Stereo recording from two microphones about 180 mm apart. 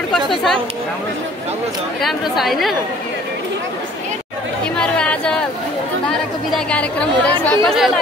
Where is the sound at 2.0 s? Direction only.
Centre (ahead or behind).